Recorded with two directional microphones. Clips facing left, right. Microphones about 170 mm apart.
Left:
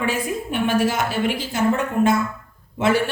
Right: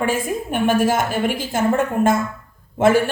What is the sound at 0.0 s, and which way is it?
A woman's voice, 50° right (ahead or behind).